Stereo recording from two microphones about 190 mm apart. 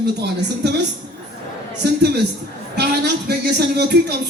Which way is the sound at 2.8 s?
60° right (ahead or behind).